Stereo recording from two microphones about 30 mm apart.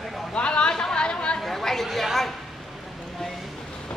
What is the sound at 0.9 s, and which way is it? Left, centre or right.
Chatter, left.